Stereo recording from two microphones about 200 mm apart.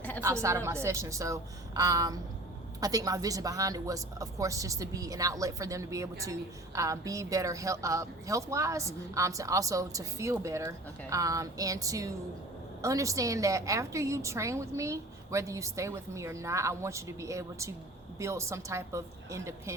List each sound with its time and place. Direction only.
0.2 s a woman's voice: 15° right (ahead or behind)